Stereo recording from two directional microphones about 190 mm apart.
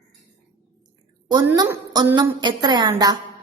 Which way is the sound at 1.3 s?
20° right (ahead or behind).